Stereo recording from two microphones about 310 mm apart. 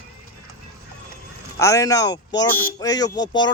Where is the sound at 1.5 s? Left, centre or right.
Centre.